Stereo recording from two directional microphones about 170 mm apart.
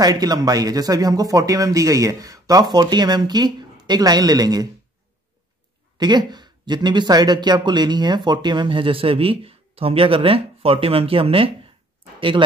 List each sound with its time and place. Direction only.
0.0 s speech: 25° right (ahead or behind)
5.9 s speech: 25° right (ahead or behind)